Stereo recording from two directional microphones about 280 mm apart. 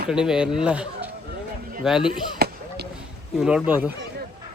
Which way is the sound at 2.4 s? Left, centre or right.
Right.